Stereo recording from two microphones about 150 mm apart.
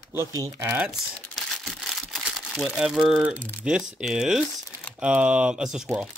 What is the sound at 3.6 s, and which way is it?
Speech, 5° right (ahead or behind).